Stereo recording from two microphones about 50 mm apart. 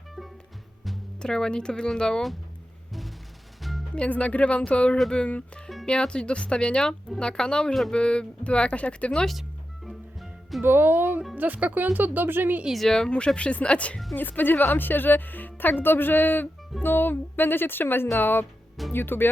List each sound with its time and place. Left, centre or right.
1.2 s speech: centre
3.6 s music: centre
3.9 s speech: left
9.8 s music: centre
10.6 s speech: right
12.9 s speech: centre
14.2 s speech: left